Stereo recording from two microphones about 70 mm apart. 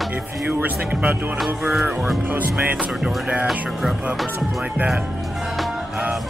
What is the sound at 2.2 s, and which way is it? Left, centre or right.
Speech, right.